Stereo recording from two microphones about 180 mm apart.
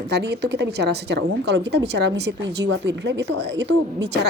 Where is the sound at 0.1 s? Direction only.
65° right (ahead or behind).